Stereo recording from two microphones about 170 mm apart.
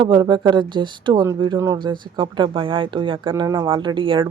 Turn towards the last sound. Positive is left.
turn(degrees=-30)  # may be behind; listen again after turning